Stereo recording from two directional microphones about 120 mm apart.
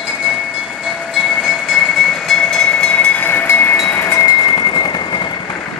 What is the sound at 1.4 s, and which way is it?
Vehicle, centre (ahead or behind).